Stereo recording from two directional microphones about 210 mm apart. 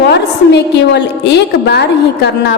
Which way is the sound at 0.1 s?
55° left (ahead or behind).